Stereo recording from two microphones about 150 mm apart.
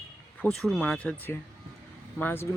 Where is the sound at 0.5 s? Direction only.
5° left (ahead or behind).